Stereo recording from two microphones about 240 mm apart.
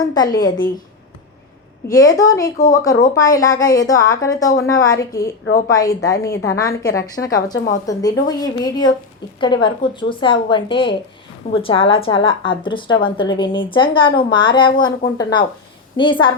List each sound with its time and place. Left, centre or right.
0.1 s a woman's voice: centre
1.9 s a woman's voice: centre
7.5 s a woman's voice: left
7.9 s a woman's voice: centre